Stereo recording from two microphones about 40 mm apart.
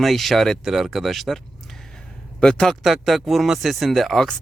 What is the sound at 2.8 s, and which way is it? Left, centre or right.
Speech, centre.